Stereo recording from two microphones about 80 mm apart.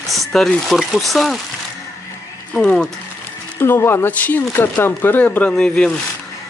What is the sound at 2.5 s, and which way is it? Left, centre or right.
Speech, centre.